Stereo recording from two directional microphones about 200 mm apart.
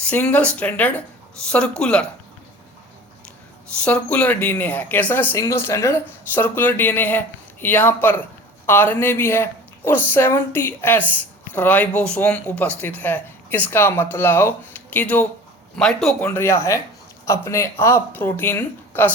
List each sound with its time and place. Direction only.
0.0 s speech: 5° left (ahead or behind)
3.8 s speech: 5° left (ahead or behind)